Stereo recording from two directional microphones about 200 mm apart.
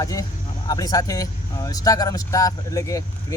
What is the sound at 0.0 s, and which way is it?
Speech, 15° left (ahead or behind).